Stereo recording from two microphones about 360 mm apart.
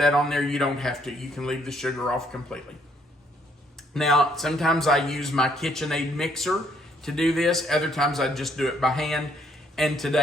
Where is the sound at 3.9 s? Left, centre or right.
Centre.